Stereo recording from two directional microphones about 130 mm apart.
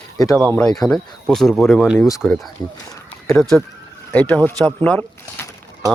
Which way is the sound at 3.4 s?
5° left (ahead or behind).